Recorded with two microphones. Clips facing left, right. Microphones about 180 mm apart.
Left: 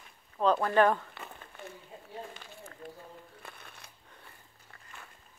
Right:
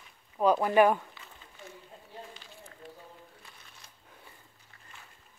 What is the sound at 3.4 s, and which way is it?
Shuffling cards, 60° left (ahead or behind).